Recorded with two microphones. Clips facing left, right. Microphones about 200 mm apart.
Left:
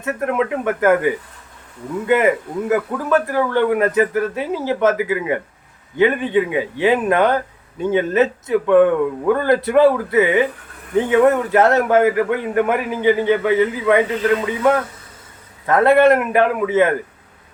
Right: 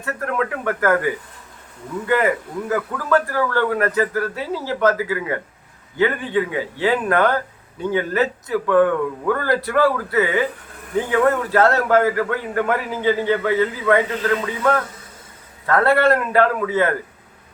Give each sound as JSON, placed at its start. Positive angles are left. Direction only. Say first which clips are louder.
{"t": 0.0, "sound": "speech", "louder": "left 4 dB", "side_deg": 20}